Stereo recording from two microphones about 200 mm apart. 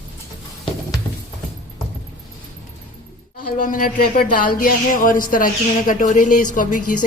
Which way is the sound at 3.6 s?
40° left (ahead or behind).